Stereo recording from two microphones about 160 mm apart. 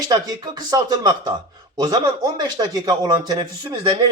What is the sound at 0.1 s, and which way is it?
A man's voice, 25° right (ahead or behind).